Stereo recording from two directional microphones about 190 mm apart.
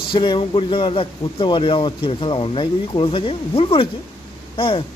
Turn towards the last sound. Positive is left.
turn(degrees=30)  # may be behind; listen again after turning